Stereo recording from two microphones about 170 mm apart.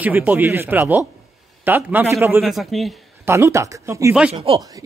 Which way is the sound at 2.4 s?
Centre (ahead or behind).